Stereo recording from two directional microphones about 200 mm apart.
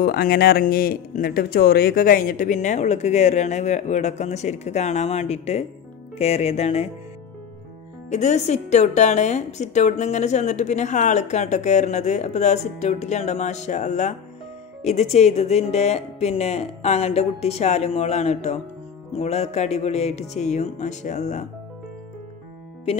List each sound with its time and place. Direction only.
0.0 s a woman's voice: 50° left (ahead or behind); by 6.9 s 30° left (ahead or behind)
8.1 s a woman's voice: 35° left (ahead or behind)